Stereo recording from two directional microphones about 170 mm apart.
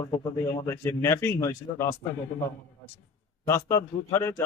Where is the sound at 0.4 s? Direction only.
15° left (ahead or behind).